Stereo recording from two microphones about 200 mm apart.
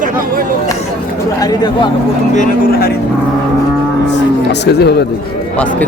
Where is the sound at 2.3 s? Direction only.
45° left (ahead or behind).